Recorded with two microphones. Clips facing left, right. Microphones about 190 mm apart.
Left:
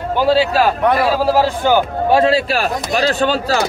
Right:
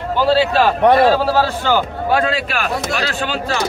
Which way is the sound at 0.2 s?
10° left (ahead or behind).